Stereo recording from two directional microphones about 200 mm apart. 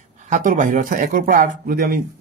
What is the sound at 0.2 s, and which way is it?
Speech, 40° right (ahead or behind).